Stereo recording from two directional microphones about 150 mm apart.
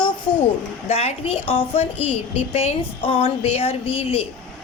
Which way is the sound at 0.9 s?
45° left (ahead or behind).